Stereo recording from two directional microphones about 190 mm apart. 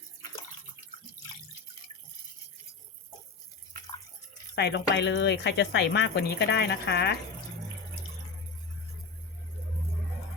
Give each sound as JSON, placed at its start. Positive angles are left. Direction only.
{"t": 4.5, "sound": "speech", "side_deg": 60}